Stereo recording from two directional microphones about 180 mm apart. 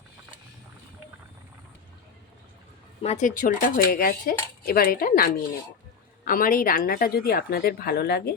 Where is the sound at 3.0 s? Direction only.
40° left (ahead or behind).